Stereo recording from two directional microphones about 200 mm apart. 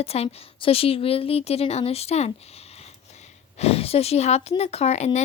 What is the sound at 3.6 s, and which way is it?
Speech, 30° left (ahead or behind).